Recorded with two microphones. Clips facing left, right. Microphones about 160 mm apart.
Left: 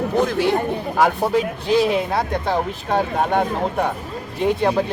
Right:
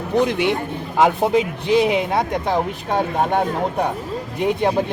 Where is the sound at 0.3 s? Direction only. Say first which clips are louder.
Left 1 dB; 20° right (ahead or behind).